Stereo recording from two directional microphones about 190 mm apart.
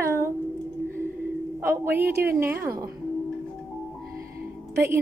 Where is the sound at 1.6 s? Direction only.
10° right (ahead or behind).